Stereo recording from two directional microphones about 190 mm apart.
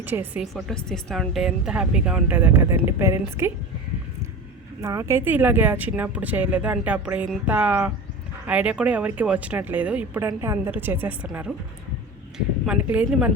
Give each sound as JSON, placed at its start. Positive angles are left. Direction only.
{"t": 0.0, "sound": "speech", "side_deg": -10}
{"t": 0.5, "sound": "a woman's voice", "side_deg": 5}
{"t": 4.8, "sound": "speech", "side_deg": -15}
{"t": 12.6, "sound": "speech", "side_deg": -5}